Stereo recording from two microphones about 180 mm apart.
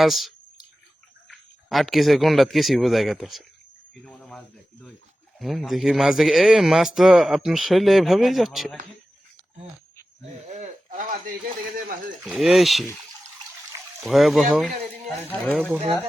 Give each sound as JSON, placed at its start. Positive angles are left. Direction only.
{"t": 0.0, "sound": "speech", "side_deg": 0}
{"t": 10.5, "sound": "a sound", "side_deg": -45}
{"t": 12.2, "sound": "speech", "side_deg": 0}
{"t": 14.0, "sound": "speech", "side_deg": 0}